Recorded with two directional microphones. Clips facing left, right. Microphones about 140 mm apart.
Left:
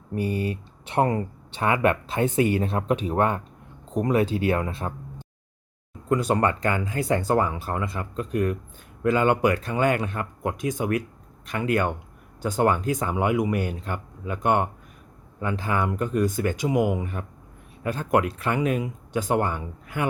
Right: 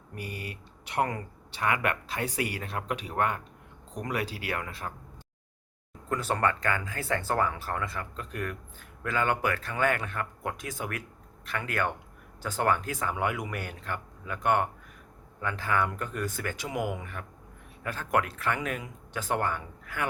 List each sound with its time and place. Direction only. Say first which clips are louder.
0.1 s speech: left 13 dB; 30° left (ahead or behind)